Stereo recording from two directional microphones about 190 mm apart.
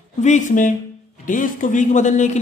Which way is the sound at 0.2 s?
40° left (ahead or behind).